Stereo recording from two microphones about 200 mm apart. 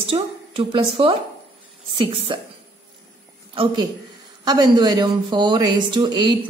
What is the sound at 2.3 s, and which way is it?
Speech, 25° right (ahead or behind).